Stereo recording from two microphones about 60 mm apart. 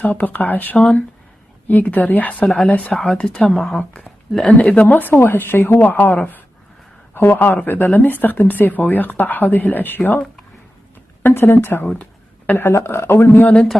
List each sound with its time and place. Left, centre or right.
0.0 s speech: left
2.4 s speech: centre; by 10.2 s left
11.2 s speech: left
11.9 s a sound: left
12.5 s speech: left
13.3 s speech: left